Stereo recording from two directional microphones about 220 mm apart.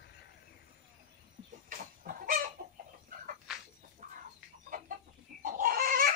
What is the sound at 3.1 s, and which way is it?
Bird, 35° right (ahead or behind).